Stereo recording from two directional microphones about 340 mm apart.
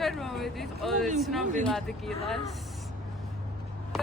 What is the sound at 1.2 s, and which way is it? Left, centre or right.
Speech, centre.